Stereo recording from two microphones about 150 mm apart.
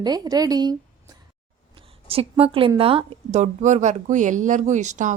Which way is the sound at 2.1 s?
40° right (ahead or behind).